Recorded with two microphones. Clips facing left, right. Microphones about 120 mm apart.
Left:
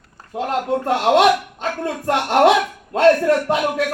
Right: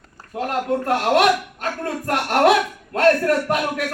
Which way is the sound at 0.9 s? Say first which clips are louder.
Left 3 dB; 30° left (ahead or behind).